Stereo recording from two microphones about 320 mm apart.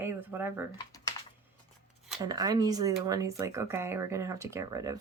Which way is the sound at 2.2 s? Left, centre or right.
Centre.